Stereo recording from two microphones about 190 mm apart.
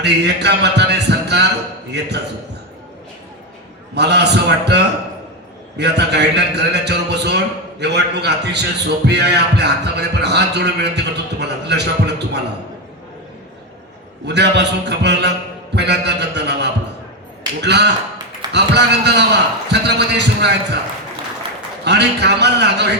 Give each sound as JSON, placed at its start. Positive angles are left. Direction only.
{"t": 0.0, "sound": "a man's voice", "side_deg": -60}
{"t": 3.9, "sound": "a man's voice", "side_deg": -65}
{"t": 14.3, "sound": "a man's voice", "side_deg": -65}
{"t": 21.8, "sound": "a man's voice", "side_deg": -60}